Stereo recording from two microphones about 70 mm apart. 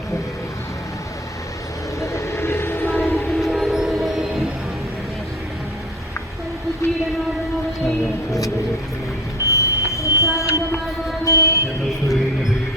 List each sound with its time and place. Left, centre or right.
2.0 s vehicle: left
3.3 s train: centre
9.4 s train: left
11.3 s music: left